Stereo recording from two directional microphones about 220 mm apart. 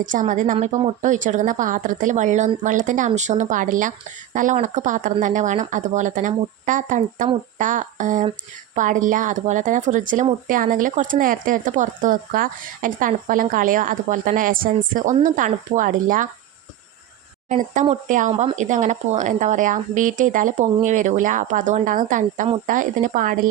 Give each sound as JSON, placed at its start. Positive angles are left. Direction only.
{"t": 0.0, "sound": "speech", "side_deg": -35}
{"t": 17.5, "sound": "speech", "side_deg": -35}